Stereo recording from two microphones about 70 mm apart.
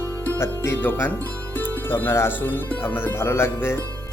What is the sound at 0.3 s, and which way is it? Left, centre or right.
Speech, left.